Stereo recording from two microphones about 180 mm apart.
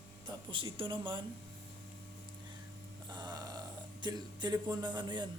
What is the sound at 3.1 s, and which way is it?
Burping, 25° right (ahead or behind).